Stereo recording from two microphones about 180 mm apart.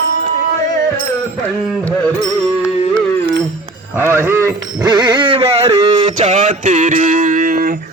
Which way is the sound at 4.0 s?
15° right (ahead or behind).